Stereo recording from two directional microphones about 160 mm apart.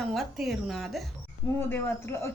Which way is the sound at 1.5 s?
15° left (ahead or behind).